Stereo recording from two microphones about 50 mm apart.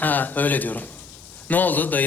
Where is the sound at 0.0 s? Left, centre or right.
Left.